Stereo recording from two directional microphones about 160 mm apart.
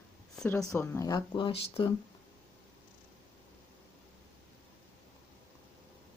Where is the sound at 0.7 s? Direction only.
15° left (ahead or behind).